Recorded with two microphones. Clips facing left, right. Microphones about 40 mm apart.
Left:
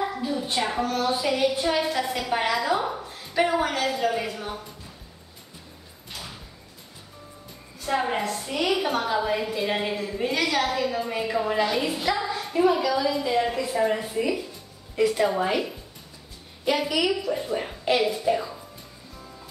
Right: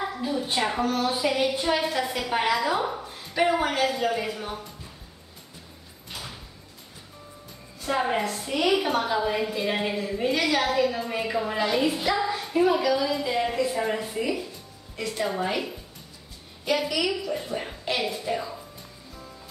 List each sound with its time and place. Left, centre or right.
0.0 s a woman's voice: centre
6.0 s door: centre
7.8 s a woman's voice: centre